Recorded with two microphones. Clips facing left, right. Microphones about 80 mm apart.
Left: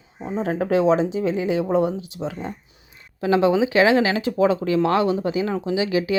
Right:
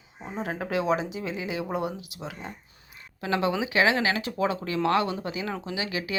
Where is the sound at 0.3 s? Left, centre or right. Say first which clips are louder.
Left 8 dB; left.